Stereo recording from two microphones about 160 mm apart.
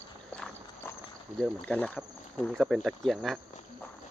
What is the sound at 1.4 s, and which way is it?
Speech, 5° left (ahead or behind).